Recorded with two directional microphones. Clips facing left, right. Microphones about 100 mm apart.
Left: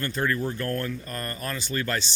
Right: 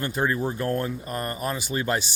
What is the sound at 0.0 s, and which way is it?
Speech, 20° right (ahead or behind).